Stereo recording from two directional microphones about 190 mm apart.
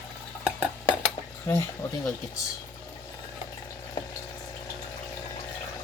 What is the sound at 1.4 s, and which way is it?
Speech, 15° left (ahead or behind).